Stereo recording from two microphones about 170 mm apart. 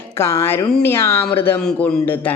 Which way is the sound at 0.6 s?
5° left (ahead or behind).